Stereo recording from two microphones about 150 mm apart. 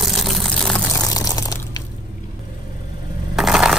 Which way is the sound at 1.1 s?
25° left (ahead or behind).